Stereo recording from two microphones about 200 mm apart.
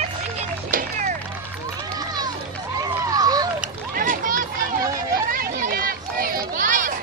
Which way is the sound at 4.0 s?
45° right (ahead or behind).